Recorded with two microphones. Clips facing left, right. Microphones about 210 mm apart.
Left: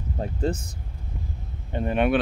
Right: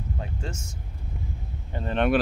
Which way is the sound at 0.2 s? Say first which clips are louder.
Left 9 dB; 35° left (ahead or behind).